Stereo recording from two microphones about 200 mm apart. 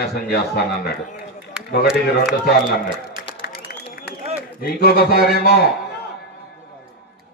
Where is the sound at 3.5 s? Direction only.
50° left (ahead or behind).